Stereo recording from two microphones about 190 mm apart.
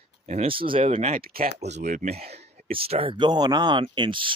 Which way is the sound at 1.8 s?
40° right (ahead or behind).